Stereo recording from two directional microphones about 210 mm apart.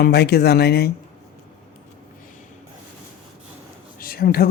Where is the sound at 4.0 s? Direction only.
45° left (ahead or behind).